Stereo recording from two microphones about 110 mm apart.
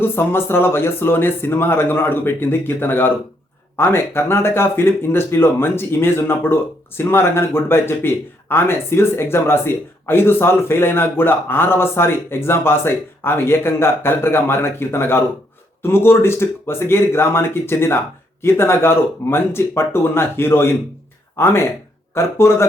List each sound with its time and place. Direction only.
0.0 s speech: 20° left (ahead or behind)